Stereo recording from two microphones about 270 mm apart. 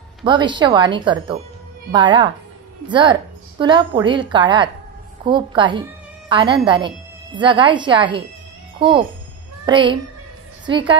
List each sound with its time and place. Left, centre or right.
0.2 s a woman's voice: centre